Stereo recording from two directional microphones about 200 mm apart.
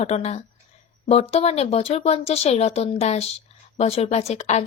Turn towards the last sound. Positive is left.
turn(degrees=35)  # may be behind; listen again after turning